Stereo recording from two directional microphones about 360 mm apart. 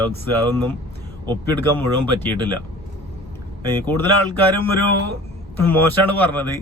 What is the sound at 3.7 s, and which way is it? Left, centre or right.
Speech, centre.